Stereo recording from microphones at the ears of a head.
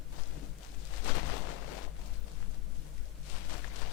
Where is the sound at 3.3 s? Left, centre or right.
Left.